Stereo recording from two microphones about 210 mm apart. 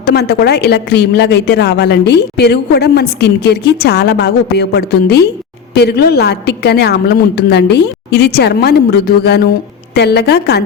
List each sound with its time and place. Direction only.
0.0 s a woman's voice: 50° left (ahead or behind)